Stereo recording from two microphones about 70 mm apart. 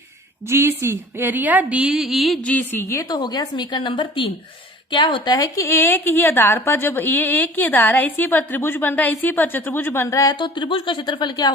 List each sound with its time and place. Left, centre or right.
0.5 s a woman's voice: right; by 2.4 s centre
2.7 s speech: left
3.1 s a woman's voice: left
5.6 s a woman's voice: left
10.1 s speech: left
11.0 s speech: left